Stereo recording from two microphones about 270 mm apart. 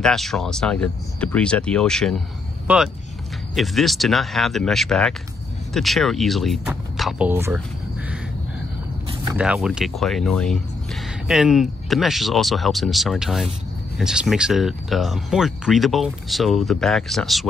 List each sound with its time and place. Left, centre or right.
0.0 s speech: centre
3.5 s speech: centre
9.3 s speech: centre